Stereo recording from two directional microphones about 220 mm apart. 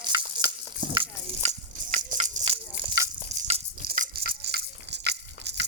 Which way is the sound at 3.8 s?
40° right (ahead or behind).